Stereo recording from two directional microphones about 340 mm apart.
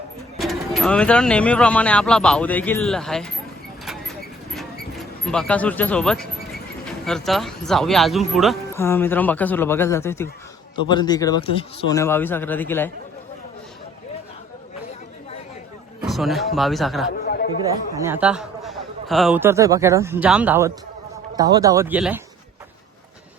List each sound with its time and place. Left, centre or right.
0.3 s speech: centre
5.2 s speech: centre
16.0 s speech: centre
17.1 s chatter: left
17.9 s speech: centre